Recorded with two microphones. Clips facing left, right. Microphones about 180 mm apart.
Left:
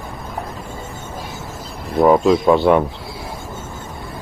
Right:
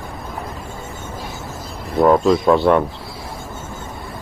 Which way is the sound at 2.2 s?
5° left (ahead or behind).